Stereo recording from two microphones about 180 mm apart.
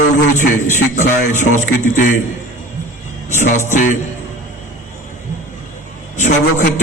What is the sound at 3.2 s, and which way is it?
Speech, 40° left (ahead or behind).